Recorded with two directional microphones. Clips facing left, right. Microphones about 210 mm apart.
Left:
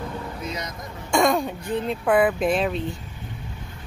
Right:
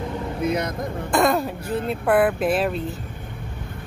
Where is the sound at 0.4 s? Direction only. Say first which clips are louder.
Right 9 dB; 55° right (ahead or behind).